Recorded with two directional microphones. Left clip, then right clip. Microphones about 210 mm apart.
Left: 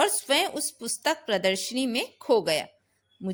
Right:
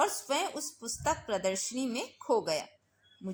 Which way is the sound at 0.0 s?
45° left (ahead or behind).